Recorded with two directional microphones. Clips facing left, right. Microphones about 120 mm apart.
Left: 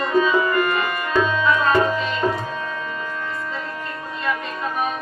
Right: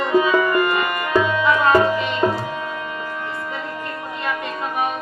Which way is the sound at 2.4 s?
15° right (ahead or behind).